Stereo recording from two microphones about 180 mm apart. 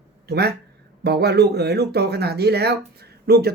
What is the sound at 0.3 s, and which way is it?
Speech, 65° right (ahead or behind).